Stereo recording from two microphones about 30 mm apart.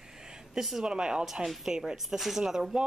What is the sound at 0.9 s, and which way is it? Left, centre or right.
Speech, right.